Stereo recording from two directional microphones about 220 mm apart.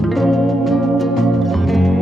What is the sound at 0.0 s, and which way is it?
Music, centre (ahead or behind).